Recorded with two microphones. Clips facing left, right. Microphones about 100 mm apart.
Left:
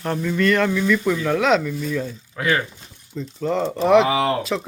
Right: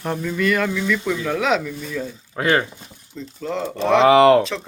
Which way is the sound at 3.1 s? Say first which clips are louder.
Left 4 dB; centre (ahead or behind).